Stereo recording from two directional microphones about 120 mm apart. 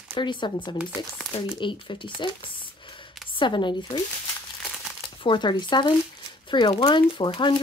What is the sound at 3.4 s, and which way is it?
Speech, 40° left (ahead or behind).